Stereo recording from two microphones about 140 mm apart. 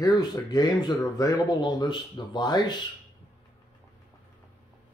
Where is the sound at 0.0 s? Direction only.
30° left (ahead or behind).